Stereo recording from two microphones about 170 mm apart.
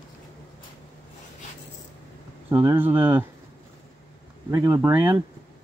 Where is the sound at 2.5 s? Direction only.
10° right (ahead or behind).